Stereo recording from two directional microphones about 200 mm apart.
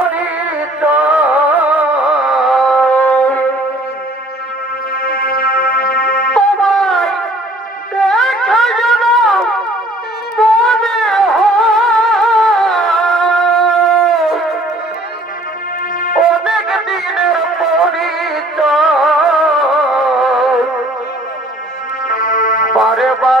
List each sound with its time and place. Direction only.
0.1 s music: 5° right (ahead or behind)
5.0 s music: 45° left (ahead or behind)
6.3 s a sound: 5° left (ahead or behind)
10.3 s music: centre (ahead or behind)
16.2 s music: 5° right (ahead or behind)
22.0 s music: 45° left (ahead or behind)
22.8 s music: centre (ahead or behind)